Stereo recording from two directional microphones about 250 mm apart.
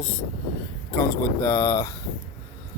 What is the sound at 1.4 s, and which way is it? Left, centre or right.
Speech, centre.